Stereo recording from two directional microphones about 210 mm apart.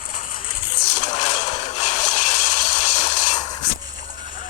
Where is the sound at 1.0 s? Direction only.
35° left (ahead or behind).